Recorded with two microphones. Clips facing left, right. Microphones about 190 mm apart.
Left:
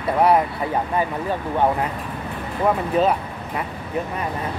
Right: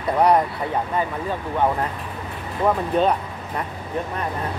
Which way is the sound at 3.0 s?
5° left (ahead or behind).